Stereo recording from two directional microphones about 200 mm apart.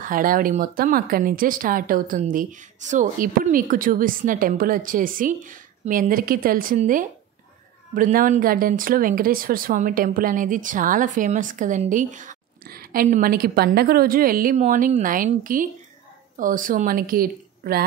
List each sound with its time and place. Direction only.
0.0 s speech: 45° right (ahead or behind)